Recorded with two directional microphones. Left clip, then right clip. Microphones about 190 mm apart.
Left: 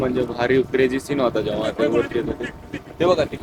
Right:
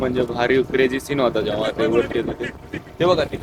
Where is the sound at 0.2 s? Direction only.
Centre (ahead or behind).